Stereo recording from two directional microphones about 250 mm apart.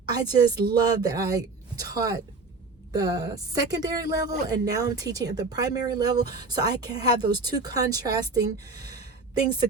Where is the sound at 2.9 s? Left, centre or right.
Centre.